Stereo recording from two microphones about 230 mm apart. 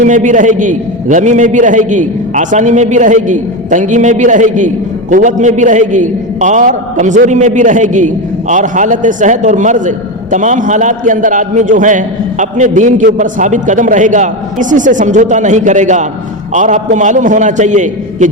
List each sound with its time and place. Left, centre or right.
0.0 s a man's voice: right